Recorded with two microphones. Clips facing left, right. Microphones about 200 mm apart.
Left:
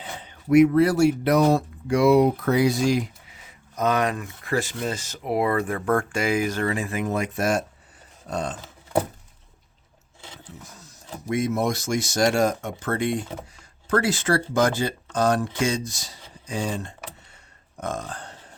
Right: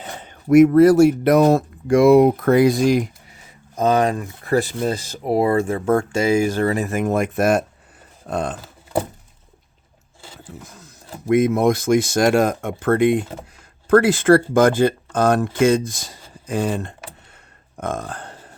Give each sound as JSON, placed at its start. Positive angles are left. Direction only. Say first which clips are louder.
{"t": 0.0, "sound": "speech", "louder": "right 4 dB", "side_deg": -50}
{"t": 3.8, "sound": "speech", "louder": "right 5 dB", "side_deg": -30}
{"t": 8.6, "sound": "a sound", "louder": "right 1 dB", "side_deg": -5}
{"t": 11.3, "sound": "speech", "louder": "right 8 dB", "side_deg": -55}